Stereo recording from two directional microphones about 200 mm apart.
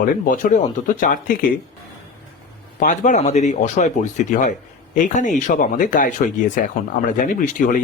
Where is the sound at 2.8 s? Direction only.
40° left (ahead or behind).